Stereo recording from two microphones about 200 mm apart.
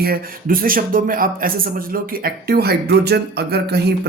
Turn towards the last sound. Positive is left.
turn(degrees=-55)  # may be behind; listen again after turning